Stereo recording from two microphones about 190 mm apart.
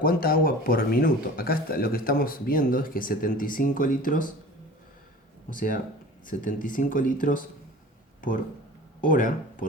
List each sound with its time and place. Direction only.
0.0 s speech: 50° left (ahead or behind)
5.5 s speech: 45° left (ahead or behind)